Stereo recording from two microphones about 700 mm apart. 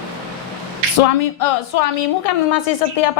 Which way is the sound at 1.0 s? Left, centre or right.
Left.